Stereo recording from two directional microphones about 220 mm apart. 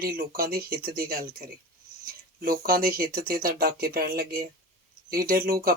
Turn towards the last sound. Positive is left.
turn(degrees=-40)  # may be behind; listen again after turning